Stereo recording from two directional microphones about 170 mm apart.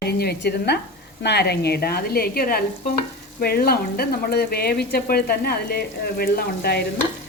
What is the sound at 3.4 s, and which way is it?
Speech, 60° left (ahead or behind).